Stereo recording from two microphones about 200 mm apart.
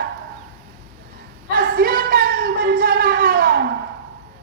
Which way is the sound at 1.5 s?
45° right (ahead or behind).